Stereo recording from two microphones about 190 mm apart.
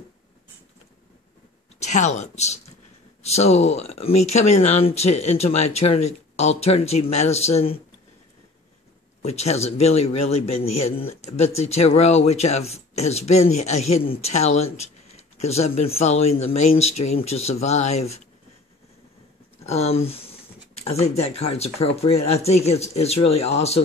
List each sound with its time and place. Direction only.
1.8 s a man's voice: 40° left (ahead or behind)
9.2 s a man's voice: 35° left (ahead or behind)
19.6 s a man's voice: 35° left (ahead or behind)